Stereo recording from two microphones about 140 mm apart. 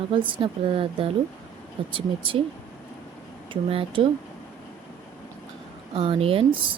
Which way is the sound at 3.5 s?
40° right (ahead or behind).